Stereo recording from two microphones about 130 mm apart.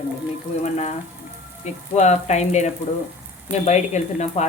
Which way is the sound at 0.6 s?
60° left (ahead or behind).